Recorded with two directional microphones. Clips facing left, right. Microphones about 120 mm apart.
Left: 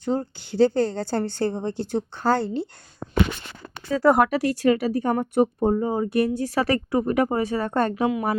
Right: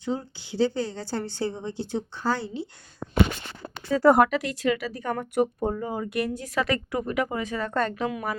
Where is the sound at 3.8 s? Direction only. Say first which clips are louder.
Even; centre (ahead or behind).